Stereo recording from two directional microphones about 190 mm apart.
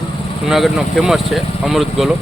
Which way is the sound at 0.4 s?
Centre (ahead or behind).